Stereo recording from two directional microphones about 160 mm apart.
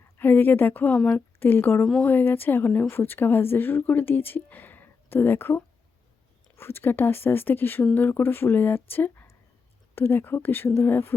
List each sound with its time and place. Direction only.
0.0 s a woman's voice: 10° left (ahead or behind)